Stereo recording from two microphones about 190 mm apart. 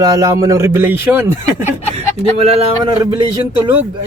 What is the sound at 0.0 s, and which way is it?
Speech, 15° right (ahead or behind).